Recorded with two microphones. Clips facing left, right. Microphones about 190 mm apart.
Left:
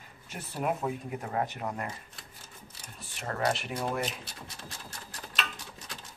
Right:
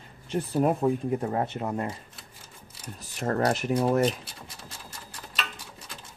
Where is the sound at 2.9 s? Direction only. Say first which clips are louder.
Right 8 dB; 40° right (ahead or behind).